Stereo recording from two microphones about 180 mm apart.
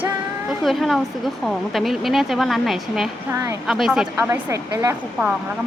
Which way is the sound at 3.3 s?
15° right (ahead or behind).